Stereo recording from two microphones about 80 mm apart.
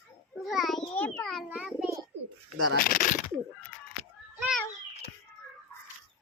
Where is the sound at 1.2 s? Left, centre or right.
Centre.